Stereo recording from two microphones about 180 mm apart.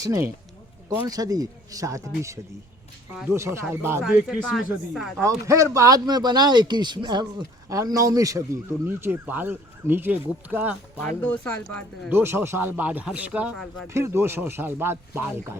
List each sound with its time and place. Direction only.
0.0 s speech: 20° right (ahead or behind)
4.0 s speech: centre (ahead or behind)
5.5 s speech: 15° right (ahead or behind)
11.2 s speech: 5° left (ahead or behind)
12.0 s speech: 10° right (ahead or behind)